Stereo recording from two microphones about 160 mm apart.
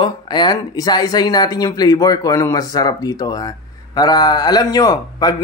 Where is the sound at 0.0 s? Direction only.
25° left (ahead or behind).